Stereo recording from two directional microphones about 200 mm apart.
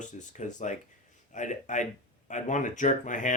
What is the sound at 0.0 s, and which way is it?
Speech, 40° left (ahead or behind).